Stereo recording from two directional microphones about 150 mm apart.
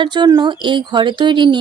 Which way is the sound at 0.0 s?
30° right (ahead or behind).